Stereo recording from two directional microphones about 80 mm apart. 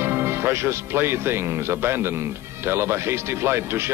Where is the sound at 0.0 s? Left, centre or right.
Right.